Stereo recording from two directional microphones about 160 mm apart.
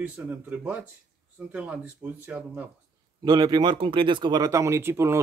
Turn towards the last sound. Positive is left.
turn(degrees=-15)  # may be behind; listen again after turning